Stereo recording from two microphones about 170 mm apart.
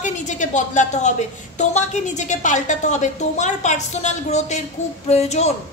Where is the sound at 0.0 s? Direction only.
45° left (ahead or behind).